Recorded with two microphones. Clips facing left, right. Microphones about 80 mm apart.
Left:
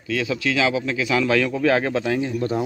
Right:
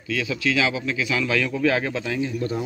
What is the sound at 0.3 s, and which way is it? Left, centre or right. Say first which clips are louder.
A man's voice: left 2 dB; left.